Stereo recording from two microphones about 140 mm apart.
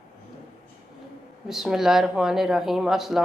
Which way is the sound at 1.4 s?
5° right (ahead or behind).